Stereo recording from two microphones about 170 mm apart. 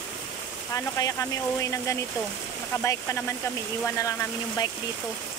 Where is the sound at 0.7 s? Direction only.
20° left (ahead or behind).